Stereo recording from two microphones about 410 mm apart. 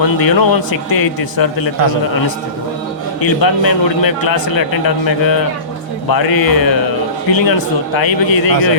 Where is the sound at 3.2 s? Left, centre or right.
Left.